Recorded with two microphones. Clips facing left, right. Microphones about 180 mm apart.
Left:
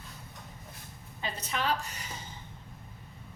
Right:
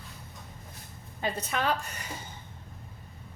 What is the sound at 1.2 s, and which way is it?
Speech, 50° right (ahead or behind).